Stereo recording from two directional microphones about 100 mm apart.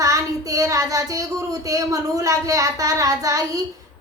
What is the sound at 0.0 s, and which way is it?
Child singing, 35° right (ahead or behind).